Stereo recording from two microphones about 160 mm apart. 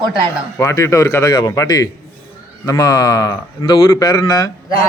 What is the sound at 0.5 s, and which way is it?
Speech, 20° left (ahead or behind).